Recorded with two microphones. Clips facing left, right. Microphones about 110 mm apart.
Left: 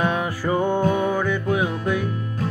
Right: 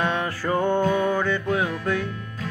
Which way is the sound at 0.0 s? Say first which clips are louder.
Left 2 dB; 10° left (ahead or behind).